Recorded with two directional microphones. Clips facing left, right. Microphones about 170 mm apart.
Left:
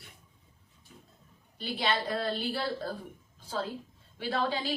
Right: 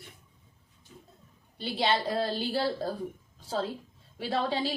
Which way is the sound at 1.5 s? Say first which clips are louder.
Right 3 dB; 25° right (ahead or behind).